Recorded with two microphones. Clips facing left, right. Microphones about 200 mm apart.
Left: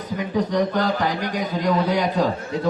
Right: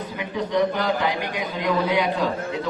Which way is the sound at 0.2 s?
40° left (ahead or behind).